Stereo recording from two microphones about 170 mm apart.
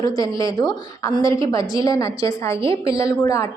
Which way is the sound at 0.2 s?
20° left (ahead or behind).